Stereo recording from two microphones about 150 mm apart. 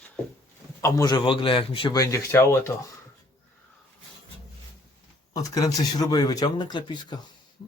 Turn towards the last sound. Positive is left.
turn(degrees=30)  # may be behind; listen again after turning